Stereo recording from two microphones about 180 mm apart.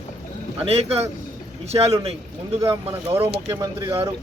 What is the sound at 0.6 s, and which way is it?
Speech, 35° right (ahead or behind).